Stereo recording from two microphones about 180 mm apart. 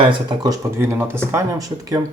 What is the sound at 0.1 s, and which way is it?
Speech, 25° right (ahead or behind).